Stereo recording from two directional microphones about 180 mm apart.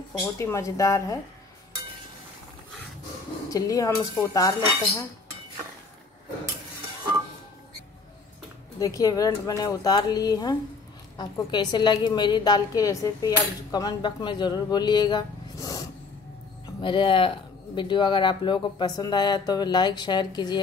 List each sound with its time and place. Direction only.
0.2 s speech: 15° left (ahead or behind)
3.4 s a woman's voice: 20° left (ahead or behind)
8.7 s a woman's voice: 20° left (ahead or behind)
16.8 s a woman's voice: 25° left (ahead or behind)